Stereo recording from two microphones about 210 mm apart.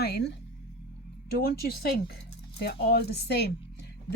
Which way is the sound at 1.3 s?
50° left (ahead or behind).